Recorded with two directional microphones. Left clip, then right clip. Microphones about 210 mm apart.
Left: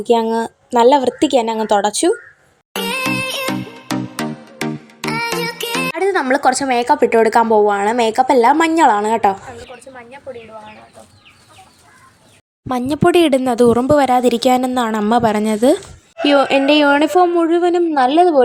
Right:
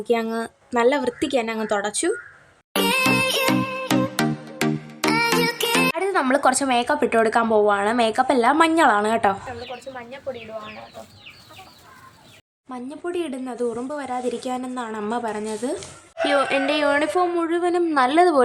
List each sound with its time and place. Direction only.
0.0 s speech: 20° left (ahead or behind)
2.7 s music: centre (ahead or behind)
6.0 s a woman's voice: 15° left (ahead or behind)
12.6 s speech: 50° left (ahead or behind)
16.2 s speech: 20° left (ahead or behind); by 18.4 s 5° left (ahead or behind)